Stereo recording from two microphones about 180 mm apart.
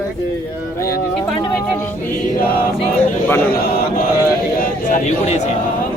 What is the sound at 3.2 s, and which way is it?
Mantra, 10° left (ahead or behind).